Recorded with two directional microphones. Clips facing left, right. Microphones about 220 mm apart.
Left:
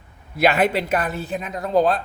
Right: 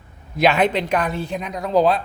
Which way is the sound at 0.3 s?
5° left (ahead or behind).